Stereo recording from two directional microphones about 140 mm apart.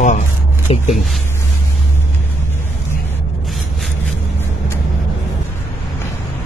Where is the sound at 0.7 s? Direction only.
45° left (ahead or behind).